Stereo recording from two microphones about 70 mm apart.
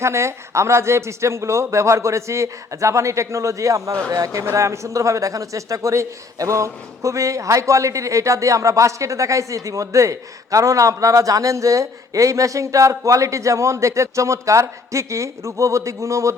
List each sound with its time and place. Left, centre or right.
0.0 s speech: right